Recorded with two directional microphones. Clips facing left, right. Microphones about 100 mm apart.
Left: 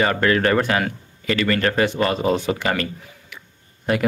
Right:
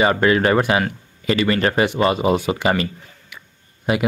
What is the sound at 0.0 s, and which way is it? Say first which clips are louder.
Speech: right 2 dB; 15° right (ahead or behind).